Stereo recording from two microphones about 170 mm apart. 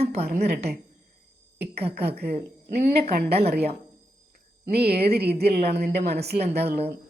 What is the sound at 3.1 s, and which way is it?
Speech, 70° right (ahead or behind).